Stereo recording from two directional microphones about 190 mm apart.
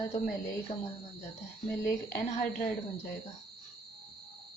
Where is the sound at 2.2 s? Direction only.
45° left (ahead or behind).